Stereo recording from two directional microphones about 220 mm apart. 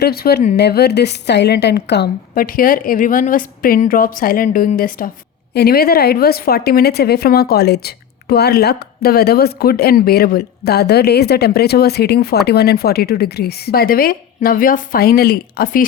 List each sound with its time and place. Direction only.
0.0 s a woman's voice: 45° left (ahead or behind)